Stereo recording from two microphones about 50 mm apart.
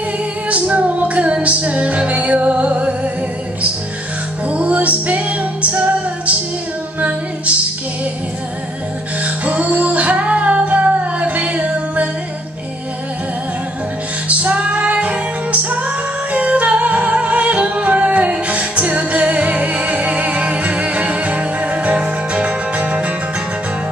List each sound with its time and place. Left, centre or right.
0.5 s music: right
4.5 s music: right
9.2 s music: right
14.2 s music: right